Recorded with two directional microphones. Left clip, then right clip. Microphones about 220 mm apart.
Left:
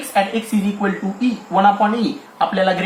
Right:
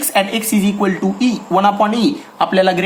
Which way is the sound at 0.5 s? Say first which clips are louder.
Right 4 dB; 35° right (ahead or behind).